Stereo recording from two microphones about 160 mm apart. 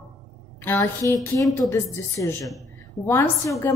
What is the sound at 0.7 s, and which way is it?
A woman's voice, 15° left (ahead or behind).